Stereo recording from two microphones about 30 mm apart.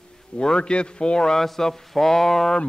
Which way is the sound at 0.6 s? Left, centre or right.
Left.